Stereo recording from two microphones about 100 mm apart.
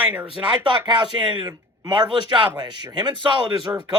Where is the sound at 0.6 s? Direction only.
50° right (ahead or behind).